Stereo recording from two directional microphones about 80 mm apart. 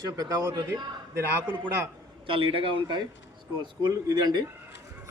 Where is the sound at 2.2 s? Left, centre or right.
Right.